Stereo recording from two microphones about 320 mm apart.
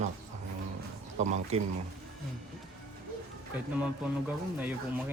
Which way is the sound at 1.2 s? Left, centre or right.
Right.